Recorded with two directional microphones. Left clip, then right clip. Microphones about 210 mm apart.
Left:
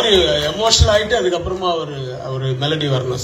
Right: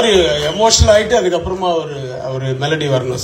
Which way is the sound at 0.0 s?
30° right (ahead or behind).